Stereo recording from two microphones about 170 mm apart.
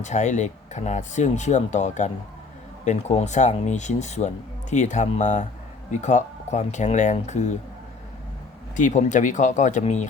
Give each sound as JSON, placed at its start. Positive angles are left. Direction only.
{"t": 0.0, "sound": "speech", "side_deg": 45}
{"t": 8.7, "sound": "speech", "side_deg": 45}